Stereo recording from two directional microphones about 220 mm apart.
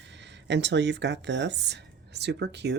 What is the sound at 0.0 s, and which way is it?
Speech, 55° right (ahead or behind).